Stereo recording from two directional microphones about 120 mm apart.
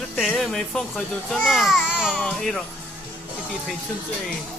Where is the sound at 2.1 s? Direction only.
5° left (ahead or behind).